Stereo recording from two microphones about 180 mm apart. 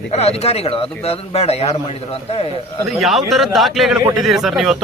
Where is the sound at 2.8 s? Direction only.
Centre (ahead or behind).